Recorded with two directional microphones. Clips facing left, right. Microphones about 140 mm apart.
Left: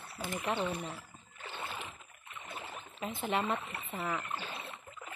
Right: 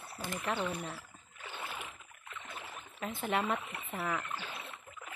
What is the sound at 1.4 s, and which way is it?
Rowboat, 5° right (ahead or behind).